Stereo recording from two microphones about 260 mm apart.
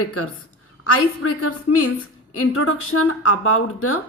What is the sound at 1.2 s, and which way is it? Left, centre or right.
Speech, left.